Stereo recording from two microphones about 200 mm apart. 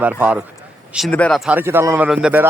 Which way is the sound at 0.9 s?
5° left (ahead or behind).